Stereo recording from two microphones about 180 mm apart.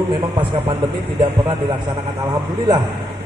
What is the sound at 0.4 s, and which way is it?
Speech, 30° right (ahead or behind).